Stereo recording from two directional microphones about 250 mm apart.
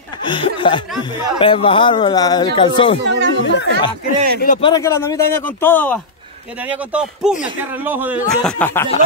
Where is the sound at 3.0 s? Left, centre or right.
Right.